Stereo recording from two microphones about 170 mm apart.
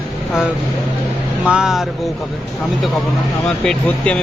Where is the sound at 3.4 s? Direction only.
5° left (ahead or behind).